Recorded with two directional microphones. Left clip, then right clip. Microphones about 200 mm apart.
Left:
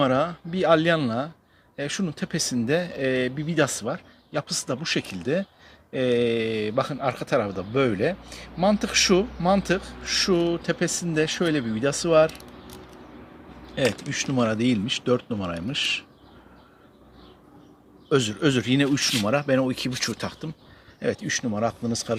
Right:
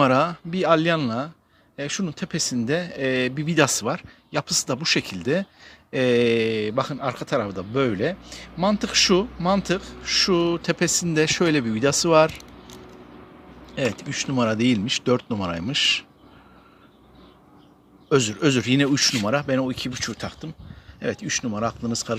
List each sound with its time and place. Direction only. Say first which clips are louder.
0.0 s speech: right 3 dB; 20° right (ahead or behind)
13.7 s speech: left 1 dB; 5° right (ahead or behind)
18.1 s speech: right 2 dB; 10° right (ahead or behind); by 20.5 s 5° left (ahead or behind)
21.0 s speech: even; 5° right (ahead or behind)